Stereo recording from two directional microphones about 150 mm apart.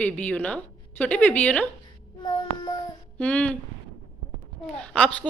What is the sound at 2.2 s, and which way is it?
Child singing, 30° left (ahead or behind).